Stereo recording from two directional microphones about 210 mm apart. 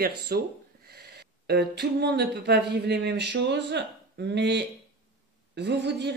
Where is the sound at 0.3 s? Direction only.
50° right (ahead or behind).